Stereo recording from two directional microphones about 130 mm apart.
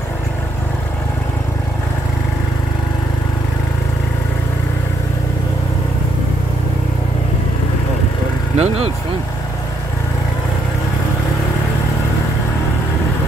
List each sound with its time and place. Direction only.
8.5 s vehicle: 50° right (ahead or behind)